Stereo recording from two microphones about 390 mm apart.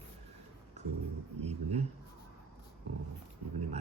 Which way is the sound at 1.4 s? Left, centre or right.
Centre.